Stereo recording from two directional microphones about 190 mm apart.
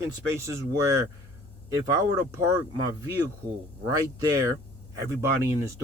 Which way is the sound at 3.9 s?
20° right (ahead or behind).